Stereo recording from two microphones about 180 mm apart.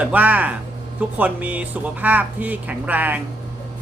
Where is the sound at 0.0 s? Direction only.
10° right (ahead or behind).